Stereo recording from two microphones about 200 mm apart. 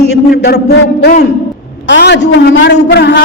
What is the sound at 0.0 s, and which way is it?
A man's voice, 55° left (ahead or behind).